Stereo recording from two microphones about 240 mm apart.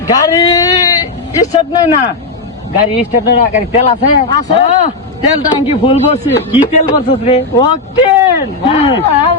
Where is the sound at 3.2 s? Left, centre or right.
Left.